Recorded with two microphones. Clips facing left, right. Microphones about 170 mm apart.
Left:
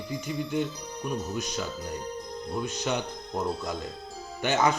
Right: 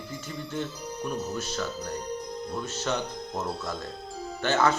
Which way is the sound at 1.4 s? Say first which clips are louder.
Right 1 dB; 15° left (ahead or behind).